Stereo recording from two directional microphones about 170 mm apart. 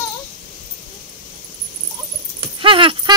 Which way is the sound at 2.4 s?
30° right (ahead or behind).